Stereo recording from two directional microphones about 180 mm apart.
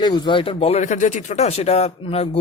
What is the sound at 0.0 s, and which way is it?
A man's voice, 25° left (ahead or behind).